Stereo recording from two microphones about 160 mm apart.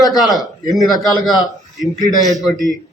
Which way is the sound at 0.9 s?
25° left (ahead or behind).